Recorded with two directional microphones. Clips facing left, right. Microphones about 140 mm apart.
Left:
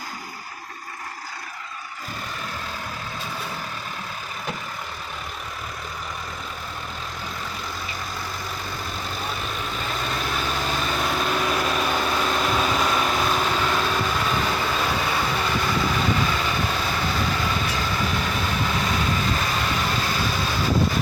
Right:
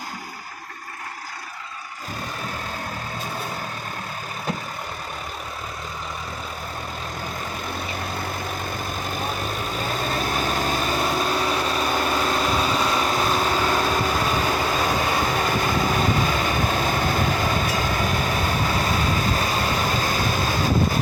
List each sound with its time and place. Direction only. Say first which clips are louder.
9.0 s vehicle: right 3 dB; 45° right (ahead or behind)
11.8 s vehicle: right 1 dB; 5° right (ahead or behind)
13.8 s vehicle: right 2 dB; 40° right (ahead or behind)